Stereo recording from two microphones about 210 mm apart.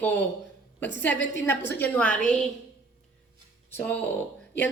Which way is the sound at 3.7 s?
10° left (ahead or behind).